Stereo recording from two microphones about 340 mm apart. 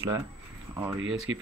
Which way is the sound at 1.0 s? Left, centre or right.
Right.